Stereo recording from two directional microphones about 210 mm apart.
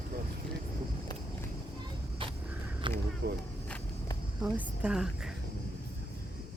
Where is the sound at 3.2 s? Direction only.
50° right (ahead or behind).